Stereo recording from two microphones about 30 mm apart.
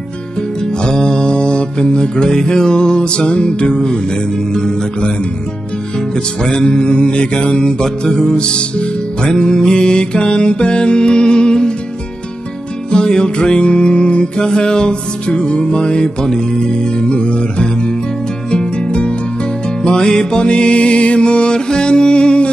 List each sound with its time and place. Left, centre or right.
0.4 s music: left
4.5 s music: left
5.9 s music: centre
6.6 s music: left
7.5 s music: centre
8.3 s music: left
9.4 s music: left
12.9 s music: left
15.2 s music: left
17.2 s music: left
18.5 s music: left